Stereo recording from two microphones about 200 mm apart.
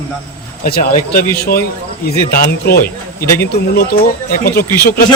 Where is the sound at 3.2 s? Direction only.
10° left (ahead or behind).